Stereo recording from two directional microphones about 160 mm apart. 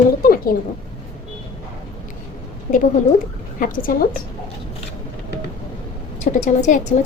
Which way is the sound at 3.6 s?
60° left (ahead or behind).